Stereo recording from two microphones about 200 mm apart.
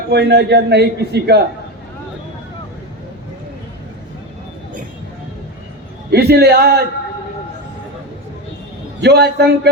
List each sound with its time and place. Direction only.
0.1 s a man's voice: 55° right (ahead or behind)
6.1 s a man's voice: 50° right (ahead or behind)
9.0 s a man's voice: 55° right (ahead or behind)